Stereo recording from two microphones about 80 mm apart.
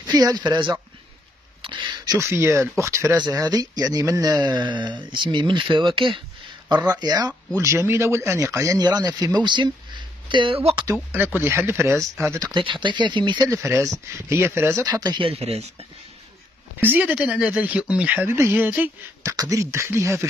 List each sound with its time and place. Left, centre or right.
0.0 s speech: right
1.6 s a sound: right
2.1 s speech: right
3.3 s speech: right
4.7 s speech: right
7.0 s speech: right
7.5 s speech: right
8.7 s speech: right
11.1 s speech: right
12.5 s speech: right
13.5 s speech: right
14.9 s speech: right
16.8 s speech: right
19.2 s speech: right